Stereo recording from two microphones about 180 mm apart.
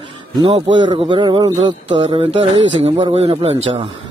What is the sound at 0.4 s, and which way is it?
A man's voice, 30° right (ahead or behind).